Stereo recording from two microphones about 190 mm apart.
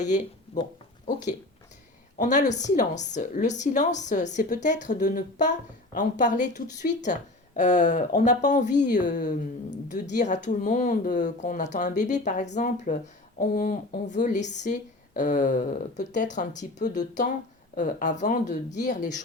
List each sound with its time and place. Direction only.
0.0 s a woman's voice: 40° left (ahead or behind)